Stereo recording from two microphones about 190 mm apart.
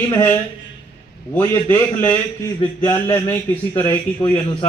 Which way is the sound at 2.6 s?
30° left (ahead or behind).